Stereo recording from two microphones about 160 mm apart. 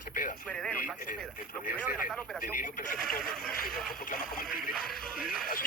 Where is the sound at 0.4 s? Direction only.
5° left (ahead or behind).